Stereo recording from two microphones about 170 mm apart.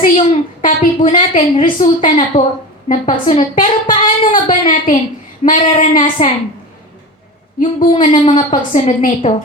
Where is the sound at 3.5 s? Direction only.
50° left (ahead or behind).